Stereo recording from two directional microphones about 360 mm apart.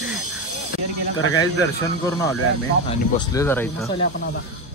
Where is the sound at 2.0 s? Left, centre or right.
Centre.